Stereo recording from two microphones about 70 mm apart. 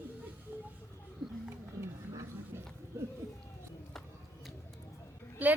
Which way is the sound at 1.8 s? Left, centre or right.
Right.